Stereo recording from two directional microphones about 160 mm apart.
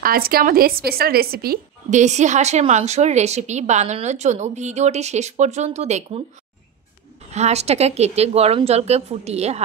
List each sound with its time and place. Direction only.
0.0 s a woman's voice: 65° right (ahead or behind)
1.9 s speech: 45° right (ahead or behind)
7.3 s a woman's voice: 45° right (ahead or behind)